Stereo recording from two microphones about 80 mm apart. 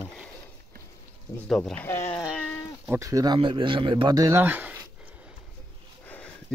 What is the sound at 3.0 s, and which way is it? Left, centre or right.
Speech, right.